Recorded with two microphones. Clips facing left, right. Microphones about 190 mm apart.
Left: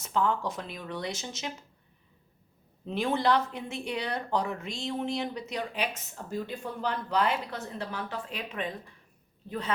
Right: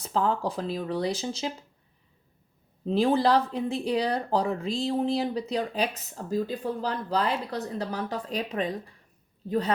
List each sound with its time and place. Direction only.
0.0 s speech: 35° right (ahead or behind)
2.8 s speech: 35° right (ahead or behind)